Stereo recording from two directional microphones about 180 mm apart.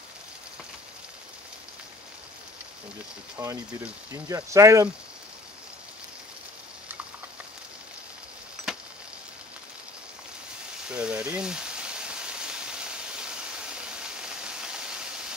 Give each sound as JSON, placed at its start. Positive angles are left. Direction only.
{"t": 3.4, "sound": "speech", "side_deg": -20}
{"t": 8.6, "sound": "a sound", "side_deg": 0}
{"t": 10.9, "sound": "rain", "side_deg": -5}